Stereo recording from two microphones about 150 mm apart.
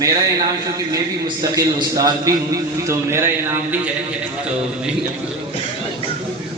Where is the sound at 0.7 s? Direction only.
25° right (ahead or behind).